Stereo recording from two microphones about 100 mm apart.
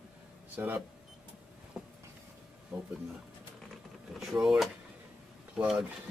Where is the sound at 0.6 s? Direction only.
20° right (ahead or behind).